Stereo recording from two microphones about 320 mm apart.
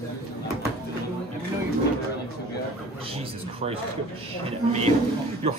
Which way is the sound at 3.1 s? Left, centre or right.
Centre.